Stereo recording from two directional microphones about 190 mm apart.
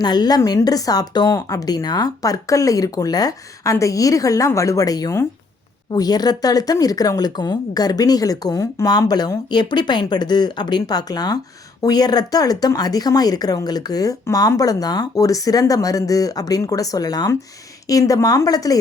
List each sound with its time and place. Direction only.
0.0 s a woman's voice: 20° left (ahead or behind)